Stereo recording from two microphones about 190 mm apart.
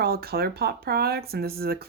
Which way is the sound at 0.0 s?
55° right (ahead or behind).